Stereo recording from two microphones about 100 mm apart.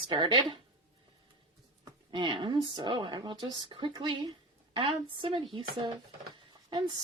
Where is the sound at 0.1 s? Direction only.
50° right (ahead or behind).